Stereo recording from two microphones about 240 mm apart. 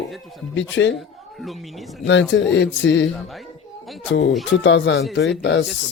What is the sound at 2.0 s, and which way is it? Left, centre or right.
Speech, left.